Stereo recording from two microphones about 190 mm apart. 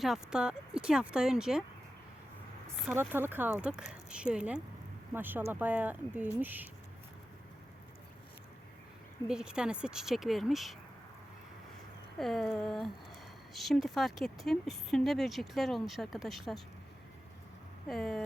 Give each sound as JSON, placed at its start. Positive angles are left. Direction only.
{"t": 0.0, "sound": "speech", "side_deg": 0}
{"t": 2.9, "sound": "speech", "side_deg": -10}
{"t": 9.2, "sound": "speech", "side_deg": -5}
{"t": 12.2, "sound": "speech", "side_deg": 0}
{"t": 17.8, "sound": "speech", "side_deg": 0}